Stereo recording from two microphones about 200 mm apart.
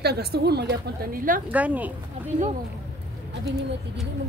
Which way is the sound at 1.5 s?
5° right (ahead or behind).